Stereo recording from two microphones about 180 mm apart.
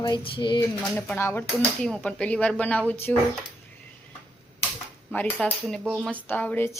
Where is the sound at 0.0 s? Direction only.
25° left (ahead or behind).